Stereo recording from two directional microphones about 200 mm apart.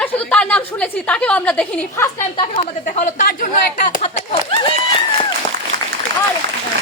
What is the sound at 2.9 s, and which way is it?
A woman's voice, 40° left (ahead or behind).